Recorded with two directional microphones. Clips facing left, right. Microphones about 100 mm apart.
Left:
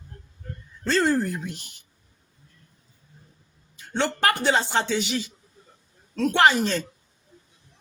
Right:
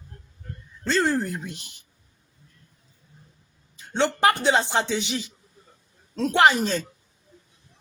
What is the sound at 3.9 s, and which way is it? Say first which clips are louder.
Speech: right 3 dB; 15° right (ahead or behind).